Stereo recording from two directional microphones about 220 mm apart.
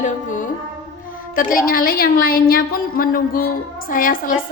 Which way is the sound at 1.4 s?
40° left (ahead or behind).